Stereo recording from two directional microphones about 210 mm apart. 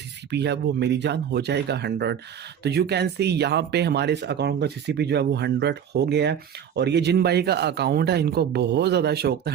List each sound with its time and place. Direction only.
0.3 s speech: 55° right (ahead or behind)